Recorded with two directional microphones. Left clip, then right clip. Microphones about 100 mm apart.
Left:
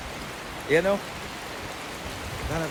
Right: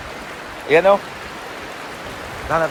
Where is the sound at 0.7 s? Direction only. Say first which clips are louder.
Right 9 dB; 15° left (ahead or behind).